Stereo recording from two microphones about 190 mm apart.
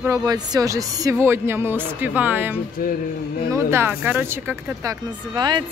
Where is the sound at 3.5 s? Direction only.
10° right (ahead or behind).